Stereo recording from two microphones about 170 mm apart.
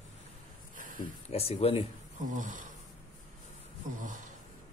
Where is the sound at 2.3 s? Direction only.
50° right (ahead or behind).